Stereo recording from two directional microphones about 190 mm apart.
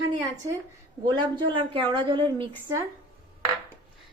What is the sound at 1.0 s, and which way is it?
A woman's voice, 25° right (ahead or behind).